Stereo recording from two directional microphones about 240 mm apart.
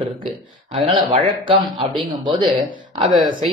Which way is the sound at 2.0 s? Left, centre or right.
Centre.